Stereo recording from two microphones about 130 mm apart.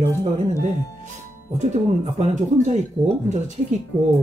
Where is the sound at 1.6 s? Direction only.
60° right (ahead or behind).